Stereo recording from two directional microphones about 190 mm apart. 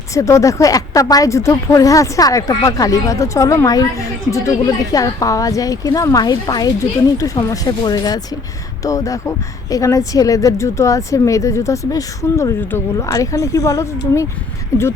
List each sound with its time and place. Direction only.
0.1 s speech: 15° left (ahead or behind)